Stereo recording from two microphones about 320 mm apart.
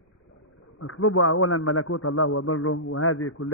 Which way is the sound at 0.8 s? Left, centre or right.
Left.